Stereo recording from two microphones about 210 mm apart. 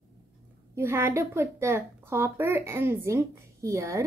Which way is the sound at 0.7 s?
10° right (ahead or behind).